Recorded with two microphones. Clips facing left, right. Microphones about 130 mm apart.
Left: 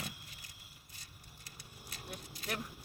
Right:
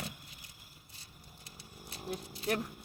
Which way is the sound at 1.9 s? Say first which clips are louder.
Right 8 dB; 35° right (ahead or behind).